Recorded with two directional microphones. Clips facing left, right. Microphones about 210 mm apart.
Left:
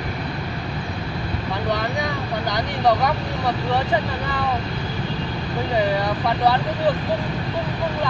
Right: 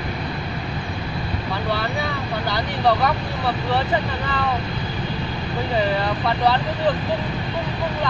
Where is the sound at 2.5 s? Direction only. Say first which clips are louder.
Left 1 dB; 15° left (ahead or behind).